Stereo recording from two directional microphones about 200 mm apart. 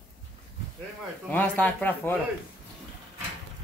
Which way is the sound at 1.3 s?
10° left (ahead or behind).